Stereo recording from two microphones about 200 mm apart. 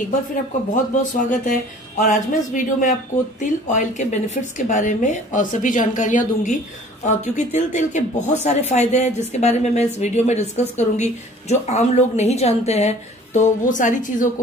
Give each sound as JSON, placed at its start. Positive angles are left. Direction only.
{"t": 1.1, "sound": "speech", "side_deg": 40}